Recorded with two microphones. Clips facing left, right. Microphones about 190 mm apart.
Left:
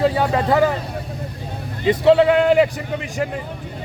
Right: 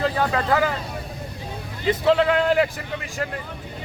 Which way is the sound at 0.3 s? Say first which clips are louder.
Left 4 dB; 20° left (ahead or behind).